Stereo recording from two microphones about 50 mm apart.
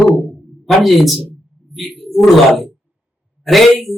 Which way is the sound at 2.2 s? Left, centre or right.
Centre.